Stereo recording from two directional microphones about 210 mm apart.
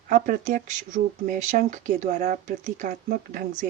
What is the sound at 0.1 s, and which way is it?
Speech, 40° right (ahead or behind).